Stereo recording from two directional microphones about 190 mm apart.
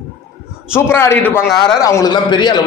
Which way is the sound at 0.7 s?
15° left (ahead or behind).